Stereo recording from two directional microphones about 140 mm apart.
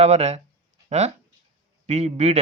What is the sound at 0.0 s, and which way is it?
Speech, 50° right (ahead or behind).